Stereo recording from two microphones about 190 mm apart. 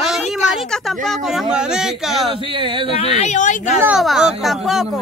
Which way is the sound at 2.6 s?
25° right (ahead or behind).